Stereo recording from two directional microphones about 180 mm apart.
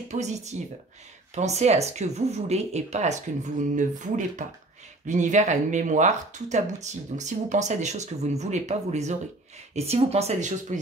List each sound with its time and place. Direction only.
0.1 s speech: 40° right (ahead or behind)